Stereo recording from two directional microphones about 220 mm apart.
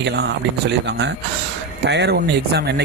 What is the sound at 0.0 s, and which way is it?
A man's voice, 50° right (ahead or behind).